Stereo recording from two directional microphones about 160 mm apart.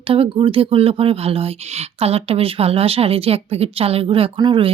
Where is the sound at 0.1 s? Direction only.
35° right (ahead or behind).